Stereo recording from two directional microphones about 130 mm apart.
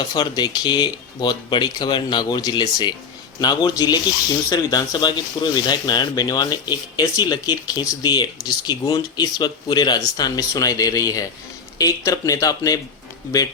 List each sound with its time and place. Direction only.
0.0 s speech: 35° left (ahead or behind)